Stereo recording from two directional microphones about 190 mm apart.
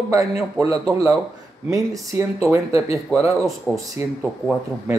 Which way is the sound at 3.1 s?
Centre (ahead or behind).